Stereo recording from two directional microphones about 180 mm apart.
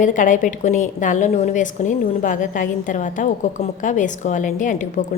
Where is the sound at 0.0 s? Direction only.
45° left (ahead or behind).